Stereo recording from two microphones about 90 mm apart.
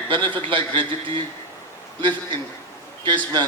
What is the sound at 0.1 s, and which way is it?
A man's voice, 70° right (ahead or behind).